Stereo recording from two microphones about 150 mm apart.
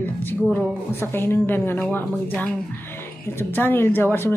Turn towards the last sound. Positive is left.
turn(degrees=15)  # may be behind; listen again after turning